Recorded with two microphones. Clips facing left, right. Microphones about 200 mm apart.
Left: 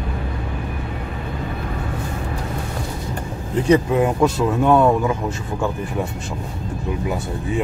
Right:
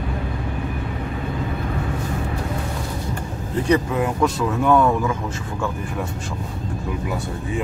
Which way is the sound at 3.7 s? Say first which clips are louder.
Left 4 dB; 25° left (ahead or behind).